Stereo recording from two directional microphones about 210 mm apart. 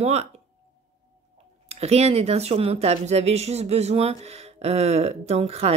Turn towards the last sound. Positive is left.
turn(degrees=-30)  # may be behind; listen again after turning